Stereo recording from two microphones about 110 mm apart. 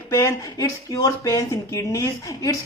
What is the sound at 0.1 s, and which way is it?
Speech, 30° left (ahead or behind).